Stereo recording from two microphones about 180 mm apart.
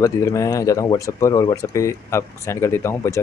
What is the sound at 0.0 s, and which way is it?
Speech, 15° left (ahead or behind).